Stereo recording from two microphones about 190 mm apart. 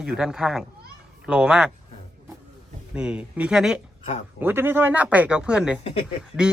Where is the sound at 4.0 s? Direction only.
30° left (ahead or behind).